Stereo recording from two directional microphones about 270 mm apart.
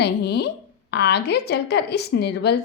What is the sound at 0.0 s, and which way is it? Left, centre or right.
A woman's voice, left.